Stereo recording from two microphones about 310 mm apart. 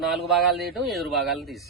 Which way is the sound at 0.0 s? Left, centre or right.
Centre.